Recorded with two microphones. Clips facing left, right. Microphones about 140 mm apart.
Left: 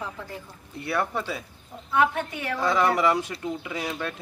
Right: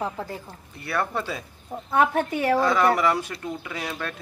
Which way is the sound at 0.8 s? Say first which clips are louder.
Even; 15° left (ahead or behind).